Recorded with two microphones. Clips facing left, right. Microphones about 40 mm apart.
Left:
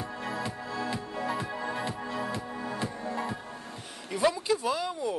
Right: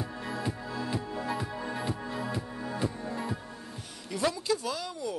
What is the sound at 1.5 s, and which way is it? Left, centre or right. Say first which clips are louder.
Music: left 1 dB; centre.